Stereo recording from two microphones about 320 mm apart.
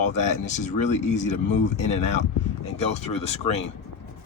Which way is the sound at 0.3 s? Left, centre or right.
Left.